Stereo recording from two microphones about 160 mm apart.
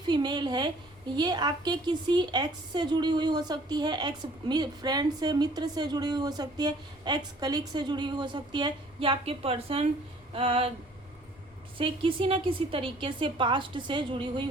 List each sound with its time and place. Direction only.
0.1 s a woman's voice: 25° right (ahead or behind)
11.8 s a woman's voice: 35° right (ahead or behind)